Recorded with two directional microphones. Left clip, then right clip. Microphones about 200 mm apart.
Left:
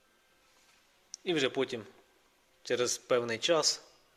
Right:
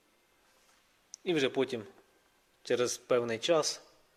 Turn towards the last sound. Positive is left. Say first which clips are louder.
# left 1 dB
turn(degrees=-10)  # may be behind; listen again after turning